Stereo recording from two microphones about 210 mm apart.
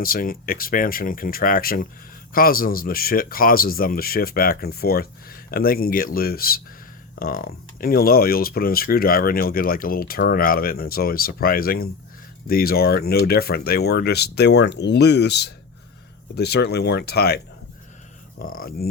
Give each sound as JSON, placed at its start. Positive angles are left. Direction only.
{"t": 0.0, "sound": "speech", "side_deg": 45}
{"t": 18.5, "sound": "speech", "side_deg": 45}